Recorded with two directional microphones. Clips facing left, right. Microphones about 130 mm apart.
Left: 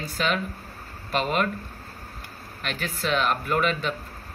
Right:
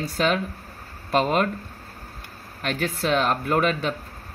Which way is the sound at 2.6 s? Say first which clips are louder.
Right 5 dB; 45° right (ahead or behind).